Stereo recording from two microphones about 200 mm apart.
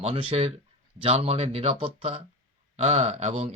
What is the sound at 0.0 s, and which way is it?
Speech, 30° right (ahead or behind).